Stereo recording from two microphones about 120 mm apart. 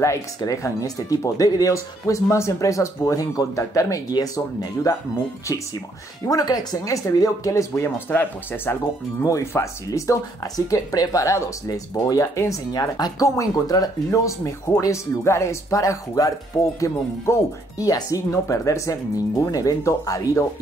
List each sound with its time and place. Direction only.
0.0 s speech: 25° left (ahead or behind)